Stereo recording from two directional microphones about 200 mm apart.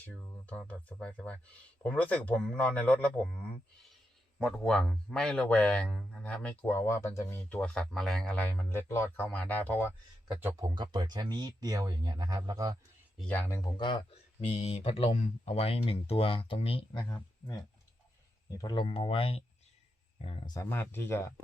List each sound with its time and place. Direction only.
0.1 s speech: 5° left (ahead or behind)
4.4 s speech: centre (ahead or behind)
10.6 s speech: 20° right (ahead or behind)
13.1 s speech: 5° left (ahead or behind); by 17.2 s 25° left (ahead or behind)
18.5 s speech: 20° left (ahead or behind)